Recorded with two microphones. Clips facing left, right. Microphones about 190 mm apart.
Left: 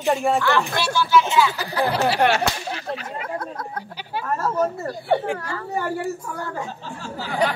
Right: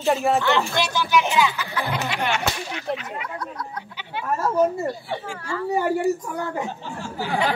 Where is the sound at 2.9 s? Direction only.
40° left (ahead or behind).